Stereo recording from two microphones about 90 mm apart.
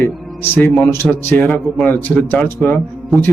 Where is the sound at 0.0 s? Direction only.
20° left (ahead or behind).